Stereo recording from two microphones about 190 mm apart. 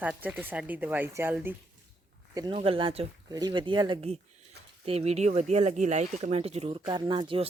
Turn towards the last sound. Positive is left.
turn(degrees=-25)  # may be behind; listen again after turning